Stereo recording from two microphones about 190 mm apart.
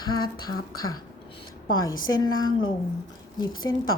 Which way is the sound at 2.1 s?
20° left (ahead or behind).